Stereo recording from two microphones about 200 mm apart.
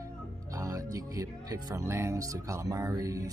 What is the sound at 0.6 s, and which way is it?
Speech, 15° right (ahead or behind).